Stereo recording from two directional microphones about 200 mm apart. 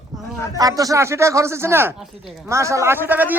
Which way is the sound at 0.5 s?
15° right (ahead or behind).